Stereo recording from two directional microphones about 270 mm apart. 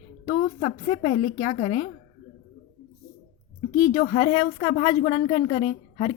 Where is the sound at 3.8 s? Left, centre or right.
Left.